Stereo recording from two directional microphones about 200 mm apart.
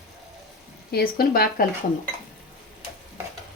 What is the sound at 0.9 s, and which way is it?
Speech, 50° left (ahead or behind).